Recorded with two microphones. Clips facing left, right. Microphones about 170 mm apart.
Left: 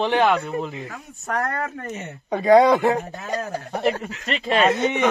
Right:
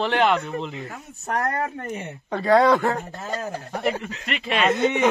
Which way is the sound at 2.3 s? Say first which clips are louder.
Left 3 dB; 15° left (ahead or behind).